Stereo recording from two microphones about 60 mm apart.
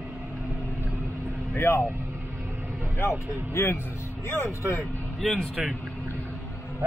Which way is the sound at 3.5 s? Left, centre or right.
Left.